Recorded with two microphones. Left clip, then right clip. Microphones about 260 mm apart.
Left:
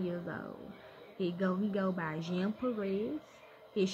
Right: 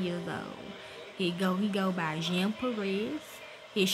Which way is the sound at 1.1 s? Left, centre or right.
Right.